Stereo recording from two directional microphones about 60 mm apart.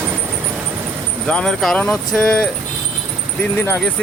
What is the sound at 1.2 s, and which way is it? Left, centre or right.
Speech, centre.